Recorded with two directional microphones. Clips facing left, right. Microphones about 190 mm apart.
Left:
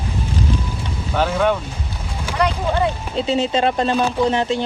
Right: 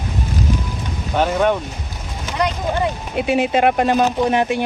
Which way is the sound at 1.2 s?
15° right (ahead or behind).